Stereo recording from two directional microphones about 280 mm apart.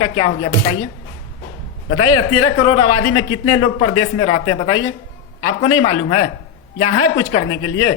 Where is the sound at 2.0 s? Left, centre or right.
Left.